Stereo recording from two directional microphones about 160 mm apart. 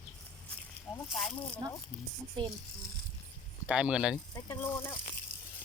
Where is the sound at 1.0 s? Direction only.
Centre (ahead or behind).